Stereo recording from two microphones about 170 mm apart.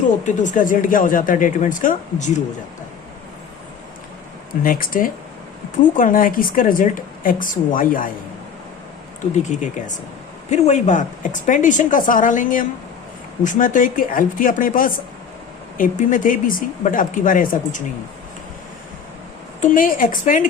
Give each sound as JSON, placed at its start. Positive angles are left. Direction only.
{"t": 0.3, "sound": "a woman's voice", "side_deg": 45}
{"t": 4.6, "sound": "a woman's voice", "side_deg": 55}
{"t": 9.3, "sound": "a woman's voice", "side_deg": 45}
{"t": 19.6, "sound": "a woman's voice", "side_deg": 55}